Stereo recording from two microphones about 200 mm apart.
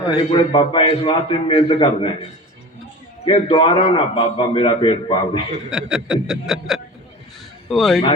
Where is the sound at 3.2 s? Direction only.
25° left (ahead or behind).